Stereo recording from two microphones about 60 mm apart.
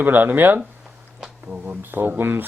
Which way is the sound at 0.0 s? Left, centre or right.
Right.